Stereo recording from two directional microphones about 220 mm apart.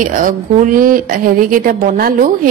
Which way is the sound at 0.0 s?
35° right (ahead or behind).